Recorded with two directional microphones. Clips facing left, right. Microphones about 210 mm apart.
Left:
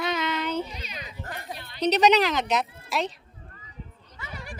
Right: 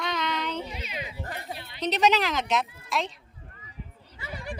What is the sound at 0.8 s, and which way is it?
Speech, 20° right (ahead or behind).